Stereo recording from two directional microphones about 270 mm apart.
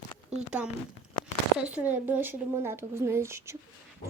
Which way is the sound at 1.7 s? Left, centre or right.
Centre.